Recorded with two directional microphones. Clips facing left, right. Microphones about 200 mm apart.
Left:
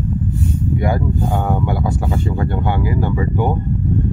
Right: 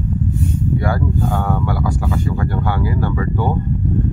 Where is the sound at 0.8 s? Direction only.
20° left (ahead or behind).